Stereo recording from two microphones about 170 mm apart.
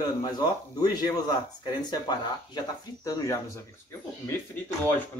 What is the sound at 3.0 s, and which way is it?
Speech, 20° left (ahead or behind).